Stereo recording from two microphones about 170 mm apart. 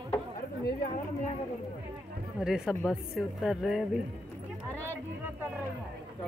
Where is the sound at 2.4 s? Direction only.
5° right (ahead or behind).